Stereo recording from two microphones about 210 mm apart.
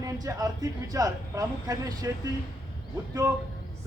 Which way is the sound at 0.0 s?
15° right (ahead or behind).